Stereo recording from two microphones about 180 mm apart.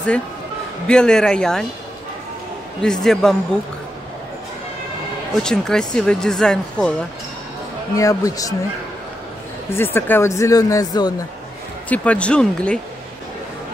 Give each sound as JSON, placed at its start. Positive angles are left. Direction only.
{"t": 0.8, "sound": "speech", "side_deg": 5}
{"t": 2.8, "sound": "speech", "side_deg": 5}
{"t": 5.3, "sound": "speech", "side_deg": 5}
{"t": 8.0, "sound": "speech", "side_deg": 20}
{"t": 9.8, "sound": "speech", "side_deg": 10}
{"t": 11.9, "sound": "speech", "side_deg": 5}